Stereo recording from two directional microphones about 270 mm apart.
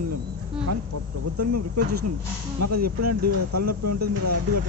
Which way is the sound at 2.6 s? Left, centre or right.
Right.